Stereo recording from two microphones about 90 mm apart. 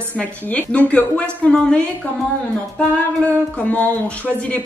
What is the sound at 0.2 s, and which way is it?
Speech, 15° left (ahead or behind).